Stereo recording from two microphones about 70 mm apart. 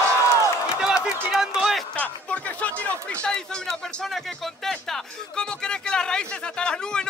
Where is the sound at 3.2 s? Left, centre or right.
Centre.